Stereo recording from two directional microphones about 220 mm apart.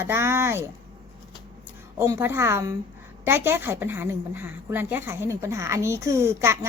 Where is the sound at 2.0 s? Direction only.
10° right (ahead or behind).